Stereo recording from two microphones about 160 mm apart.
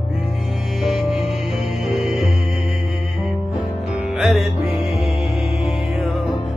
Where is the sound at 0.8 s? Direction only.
Centre (ahead or behind).